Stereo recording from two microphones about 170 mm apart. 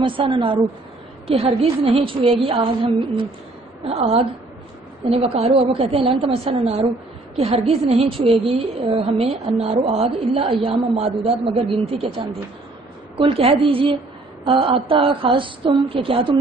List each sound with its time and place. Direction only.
0.0 s a woman's voice: 30° right (ahead or behind)